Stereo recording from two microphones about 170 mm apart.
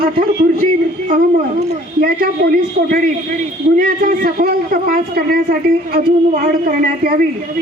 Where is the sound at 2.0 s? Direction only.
65° right (ahead or behind).